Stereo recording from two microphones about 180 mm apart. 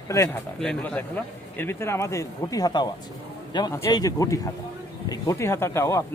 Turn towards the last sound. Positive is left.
turn(degrees=15)  # may be behind; listen again after turning